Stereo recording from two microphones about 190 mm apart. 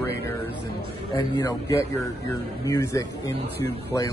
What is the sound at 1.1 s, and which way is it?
A man's voice, 15° left (ahead or behind).